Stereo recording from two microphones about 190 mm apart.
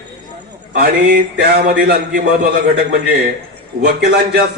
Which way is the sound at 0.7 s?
50° right (ahead or behind).